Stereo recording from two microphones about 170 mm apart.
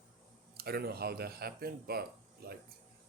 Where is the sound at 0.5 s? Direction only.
65° right (ahead or behind).